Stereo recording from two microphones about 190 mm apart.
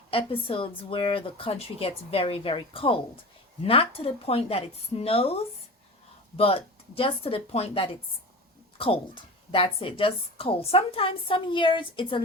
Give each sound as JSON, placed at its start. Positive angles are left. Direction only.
{"t": 0.1, "sound": "a woman's voice", "side_deg": 30}